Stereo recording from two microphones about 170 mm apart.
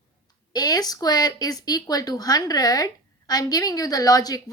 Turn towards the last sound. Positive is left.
turn(degrees=20)  # may be behind; listen again after turning